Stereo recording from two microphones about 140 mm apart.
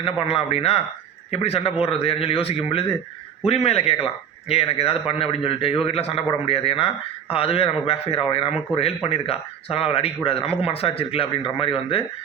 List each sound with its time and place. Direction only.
0.0 s speech: 40° left (ahead or behind)